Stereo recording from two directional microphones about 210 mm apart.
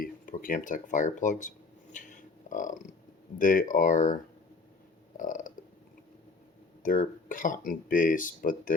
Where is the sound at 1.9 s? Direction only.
35° left (ahead or behind).